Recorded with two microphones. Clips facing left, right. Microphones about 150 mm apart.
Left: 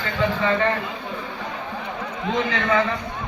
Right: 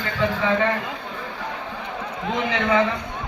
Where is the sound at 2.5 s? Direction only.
15° right (ahead or behind).